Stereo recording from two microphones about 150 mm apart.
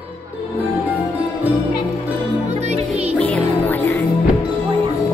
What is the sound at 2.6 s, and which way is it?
Music, 45° right (ahead or behind).